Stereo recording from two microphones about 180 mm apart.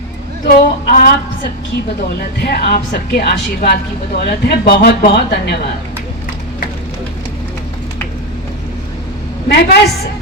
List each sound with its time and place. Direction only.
0.4 s speech: 50° left (ahead or behind)
2.4 s speech: 60° left (ahead or behind)
9.5 s speech: 65° left (ahead or behind)